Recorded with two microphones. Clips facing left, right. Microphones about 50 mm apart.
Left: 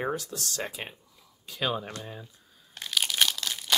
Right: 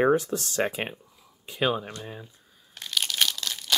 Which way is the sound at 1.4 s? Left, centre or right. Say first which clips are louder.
Right 4 dB; right.